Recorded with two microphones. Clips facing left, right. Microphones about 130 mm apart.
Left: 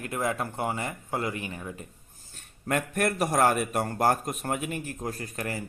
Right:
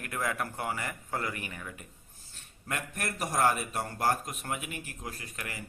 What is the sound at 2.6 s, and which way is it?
A man's voice, 55° left (ahead or behind).